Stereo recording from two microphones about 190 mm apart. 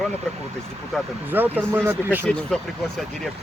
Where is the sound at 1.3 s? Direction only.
10° right (ahead or behind).